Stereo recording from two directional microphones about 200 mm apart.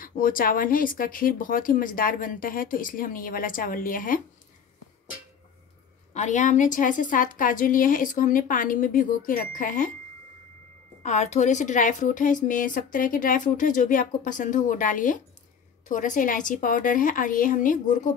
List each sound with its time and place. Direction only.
0.0 s speech: 45° left (ahead or behind)
6.1 s speech: 35° left (ahead or behind)
11.0 s speech: 35° left (ahead or behind)